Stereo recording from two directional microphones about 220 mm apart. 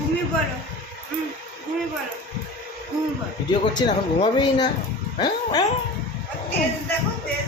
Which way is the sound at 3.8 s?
20° left (ahead or behind).